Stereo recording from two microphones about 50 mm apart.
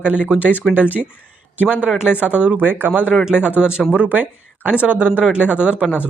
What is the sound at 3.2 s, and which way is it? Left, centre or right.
Speech, centre.